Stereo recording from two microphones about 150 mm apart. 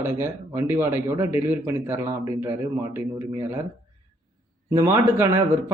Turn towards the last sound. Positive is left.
turn(degrees=-20)  # may be behind; listen again after turning